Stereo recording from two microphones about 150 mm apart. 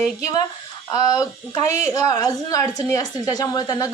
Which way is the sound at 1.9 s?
25° left (ahead or behind).